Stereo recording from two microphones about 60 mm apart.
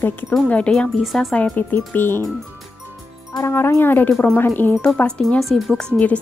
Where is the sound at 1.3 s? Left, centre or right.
Left.